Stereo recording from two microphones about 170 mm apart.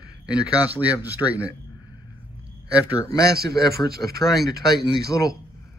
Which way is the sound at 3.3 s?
65° right (ahead or behind).